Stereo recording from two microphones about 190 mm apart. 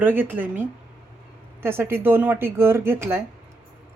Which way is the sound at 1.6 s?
10° right (ahead or behind).